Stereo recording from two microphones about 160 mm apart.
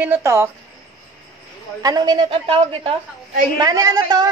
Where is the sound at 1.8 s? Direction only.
25° right (ahead or behind).